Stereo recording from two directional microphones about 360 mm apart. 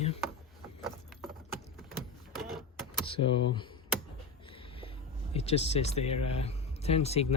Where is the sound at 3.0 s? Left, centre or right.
Centre.